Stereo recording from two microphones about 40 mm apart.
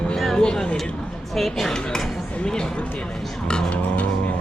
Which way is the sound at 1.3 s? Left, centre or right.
Centre.